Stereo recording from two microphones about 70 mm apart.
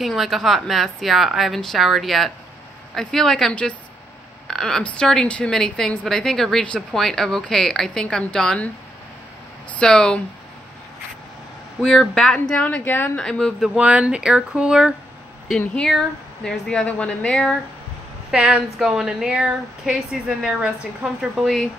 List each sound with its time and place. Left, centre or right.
0.0 s a woman's voice: centre
9.7 s a woman's voice: centre
11.8 s speech: centre
12.6 s a woman's voice: left
13.2 s a woman's voice: centre
13.6 s speech: centre
15.5 s a woman's voice: centre
18.3 s speech: centre
21.4 s speech: centre